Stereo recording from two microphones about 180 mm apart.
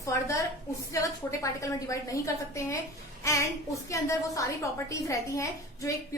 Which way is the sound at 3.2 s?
15° left (ahead or behind).